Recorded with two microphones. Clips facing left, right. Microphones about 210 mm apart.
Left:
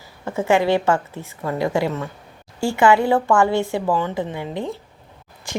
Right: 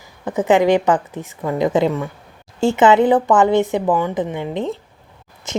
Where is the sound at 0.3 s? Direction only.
15° right (ahead or behind).